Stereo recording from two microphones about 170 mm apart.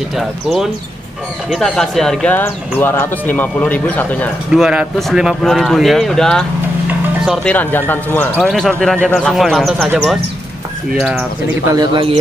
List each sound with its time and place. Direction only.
0.1 s speech: centre (ahead or behind)
4.5 s speech: 5° right (ahead or behind)
7.4 s speech: 10° left (ahead or behind)
8.4 s speech: centre (ahead or behind)
10.9 s speech: 5° right (ahead or behind)
11.7 s speech: 25° right (ahead or behind)